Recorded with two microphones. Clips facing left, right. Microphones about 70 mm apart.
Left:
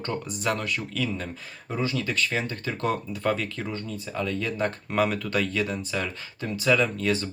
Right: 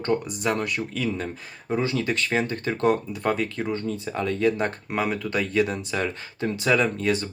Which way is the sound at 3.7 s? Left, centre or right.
Right.